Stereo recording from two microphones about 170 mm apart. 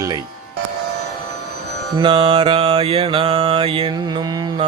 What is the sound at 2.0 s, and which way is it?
Mantra, 30° right (ahead or behind).